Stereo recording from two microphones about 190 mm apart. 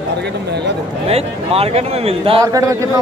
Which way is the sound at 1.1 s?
30° right (ahead or behind).